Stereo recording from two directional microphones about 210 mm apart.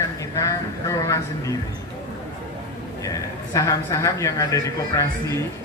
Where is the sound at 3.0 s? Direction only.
15° left (ahead or behind).